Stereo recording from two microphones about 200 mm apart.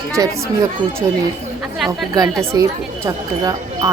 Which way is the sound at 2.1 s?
15° right (ahead or behind).